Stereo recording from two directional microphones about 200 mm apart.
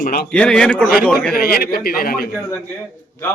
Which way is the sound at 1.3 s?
50° left (ahead or behind).